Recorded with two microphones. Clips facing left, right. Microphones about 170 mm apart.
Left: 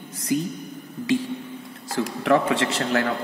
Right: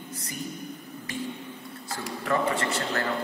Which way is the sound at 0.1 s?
90° left.